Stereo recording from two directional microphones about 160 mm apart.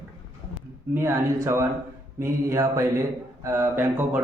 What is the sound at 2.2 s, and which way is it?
Mantra, 20° right (ahead or behind).